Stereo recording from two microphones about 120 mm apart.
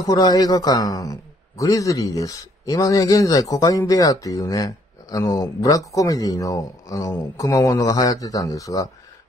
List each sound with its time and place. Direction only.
0.0 s a man's voice: 30° left (ahead or behind)